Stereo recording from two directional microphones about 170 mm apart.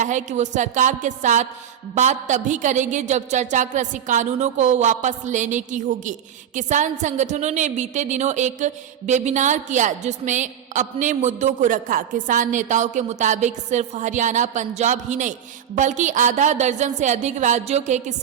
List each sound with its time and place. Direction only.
0.0 s a woman's voice: 45° right (ahead or behind)